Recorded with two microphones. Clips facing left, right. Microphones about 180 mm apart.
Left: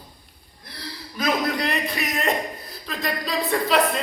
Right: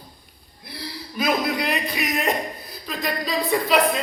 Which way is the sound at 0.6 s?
10° right (ahead or behind).